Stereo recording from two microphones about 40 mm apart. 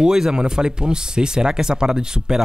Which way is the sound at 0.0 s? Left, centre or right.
Centre.